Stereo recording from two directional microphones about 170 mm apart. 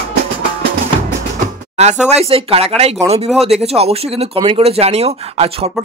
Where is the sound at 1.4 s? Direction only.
40° right (ahead or behind).